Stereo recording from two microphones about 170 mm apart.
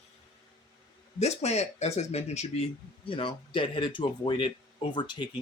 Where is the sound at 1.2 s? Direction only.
40° left (ahead or behind).